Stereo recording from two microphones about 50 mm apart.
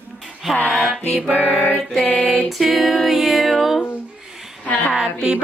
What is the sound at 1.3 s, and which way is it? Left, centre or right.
Music, left.